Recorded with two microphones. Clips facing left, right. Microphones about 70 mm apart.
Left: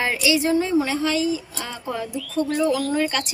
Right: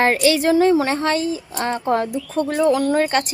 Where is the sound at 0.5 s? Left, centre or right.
Right.